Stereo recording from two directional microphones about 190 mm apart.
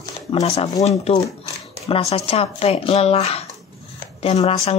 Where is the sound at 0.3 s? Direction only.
35° left (ahead or behind).